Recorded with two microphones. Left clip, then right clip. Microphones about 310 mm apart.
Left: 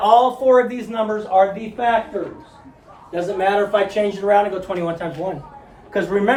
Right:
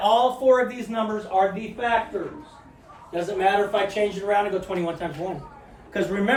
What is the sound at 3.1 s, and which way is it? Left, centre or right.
Speech, left.